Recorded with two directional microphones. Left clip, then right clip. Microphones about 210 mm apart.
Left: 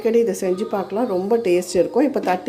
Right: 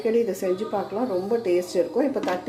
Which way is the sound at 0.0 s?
35° left (ahead or behind).